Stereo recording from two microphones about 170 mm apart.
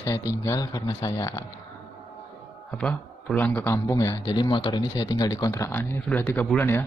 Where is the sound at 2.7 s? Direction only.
5° left (ahead or behind).